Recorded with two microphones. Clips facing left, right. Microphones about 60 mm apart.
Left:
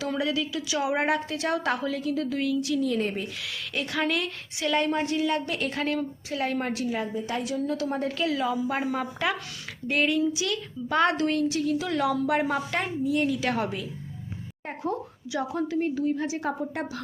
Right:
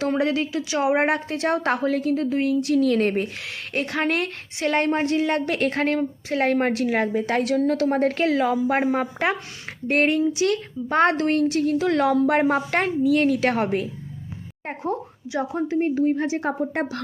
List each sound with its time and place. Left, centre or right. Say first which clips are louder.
0.0 s a woman's voice: right 6 dB; right
6.8 s a woman's voice: right 7 dB; right
13.0 s speech: right 6 dB; right
13.2 s a woman's voice: right 6 dB; right
14.7 s speech: right 3 dB; right